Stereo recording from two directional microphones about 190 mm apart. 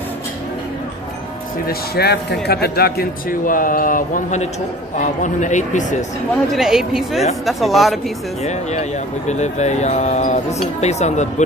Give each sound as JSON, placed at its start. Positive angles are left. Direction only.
{"t": 1.7, "sound": "a man's voice", "side_deg": 55}
{"t": 6.5, "sound": "a woman's voice", "side_deg": -5}
{"t": 9.3, "sound": "a man's voice", "side_deg": 35}